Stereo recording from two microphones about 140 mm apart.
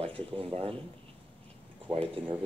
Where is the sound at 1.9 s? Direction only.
40° right (ahead or behind).